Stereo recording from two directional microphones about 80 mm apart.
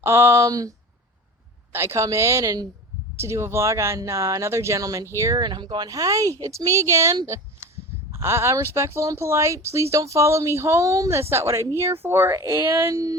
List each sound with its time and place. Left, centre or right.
0.0 s speech: right
1.7 s speech: right
5.4 s speech: right
5.9 s speech: right
12.9 s speech: right